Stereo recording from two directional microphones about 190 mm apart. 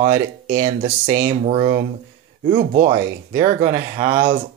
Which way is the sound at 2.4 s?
45° right (ahead or behind).